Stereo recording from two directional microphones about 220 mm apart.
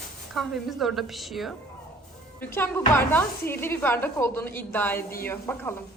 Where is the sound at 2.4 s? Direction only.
10° left (ahead or behind).